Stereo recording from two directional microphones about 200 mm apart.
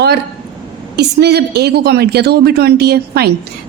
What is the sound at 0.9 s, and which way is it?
A woman's voice, 55° right (ahead or behind).